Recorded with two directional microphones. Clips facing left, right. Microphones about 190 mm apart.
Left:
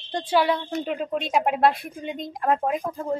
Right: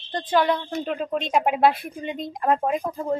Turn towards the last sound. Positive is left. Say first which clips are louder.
# right 1 dB
turn(degrees=0)  # may be behind; listen again after turning